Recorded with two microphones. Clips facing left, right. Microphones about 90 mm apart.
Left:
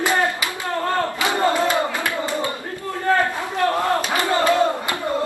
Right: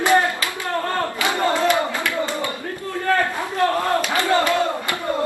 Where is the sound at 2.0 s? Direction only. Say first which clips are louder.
Even; 20° left (ahead or behind).